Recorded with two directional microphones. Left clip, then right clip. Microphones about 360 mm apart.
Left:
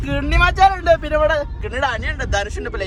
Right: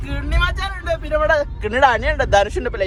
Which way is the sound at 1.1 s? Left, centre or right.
Centre.